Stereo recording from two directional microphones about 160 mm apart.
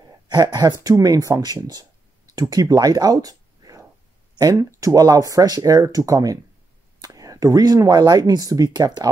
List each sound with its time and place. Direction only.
0.3 s speech: 25° right (ahead or behind)